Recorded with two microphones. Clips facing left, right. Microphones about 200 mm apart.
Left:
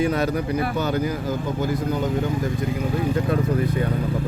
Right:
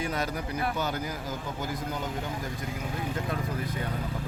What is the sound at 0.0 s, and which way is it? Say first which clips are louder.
Speech: left 10 dB; 65° left (ahead or behind).